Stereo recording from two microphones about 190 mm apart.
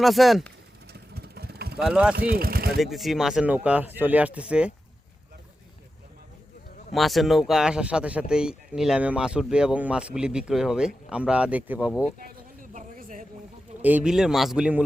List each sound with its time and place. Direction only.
0.0 s speech: centre (ahead or behind)
0.9 s vehicle: 55° right (ahead or behind)
1.8 s speech: 5° right (ahead or behind)
2.1 s speech: 50° right (ahead or behind)
2.8 s speech: centre (ahead or behind)
6.9 s speech: centre (ahead or behind)
12.2 s a sound: 45° right (ahead or behind)
13.8 s speech: 5° right (ahead or behind)